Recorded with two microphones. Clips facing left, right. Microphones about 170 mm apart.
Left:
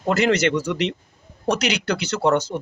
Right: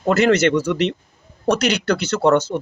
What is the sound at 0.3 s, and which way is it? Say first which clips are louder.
Speech: right 4 dB; 15° left (ahead or behind).